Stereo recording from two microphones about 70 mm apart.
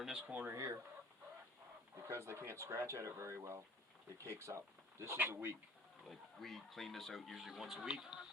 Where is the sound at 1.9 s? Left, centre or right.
Right.